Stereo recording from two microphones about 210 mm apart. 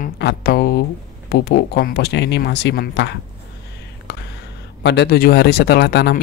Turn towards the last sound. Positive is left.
turn(degrees=50)  # may be behind; listen again after turning